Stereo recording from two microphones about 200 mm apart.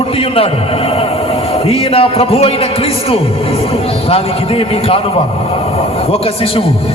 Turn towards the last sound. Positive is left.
turn(degrees=25)  # may be behind; listen again after turning